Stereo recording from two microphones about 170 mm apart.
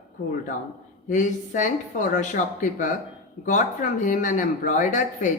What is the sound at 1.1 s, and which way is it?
Speech, 45° left (ahead or behind).